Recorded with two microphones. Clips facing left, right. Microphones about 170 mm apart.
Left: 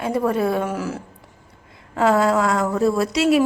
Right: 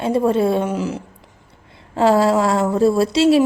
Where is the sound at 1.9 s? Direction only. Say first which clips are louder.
Right 3 dB; 30° right (ahead or behind).